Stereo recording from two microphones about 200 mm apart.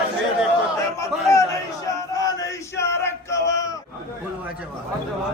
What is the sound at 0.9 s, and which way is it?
Chatter, 15° left (ahead or behind).